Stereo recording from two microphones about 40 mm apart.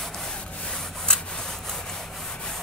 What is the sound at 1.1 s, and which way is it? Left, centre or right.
Sawing, centre.